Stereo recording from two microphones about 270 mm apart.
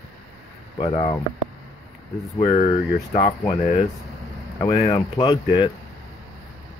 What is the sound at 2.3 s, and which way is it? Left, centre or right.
Speech, left.